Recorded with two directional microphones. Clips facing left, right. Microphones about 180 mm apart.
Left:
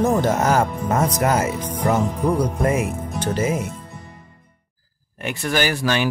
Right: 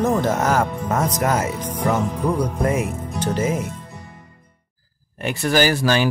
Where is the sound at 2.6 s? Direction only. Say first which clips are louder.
Left 1 dB; centre (ahead or behind).